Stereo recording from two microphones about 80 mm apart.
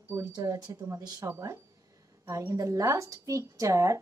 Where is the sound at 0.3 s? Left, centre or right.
Right.